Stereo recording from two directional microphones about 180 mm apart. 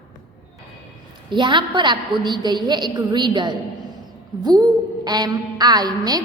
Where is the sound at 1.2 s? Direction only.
25° right (ahead or behind).